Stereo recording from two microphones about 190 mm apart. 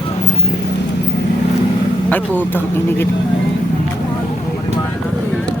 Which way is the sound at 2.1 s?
10° left (ahead or behind).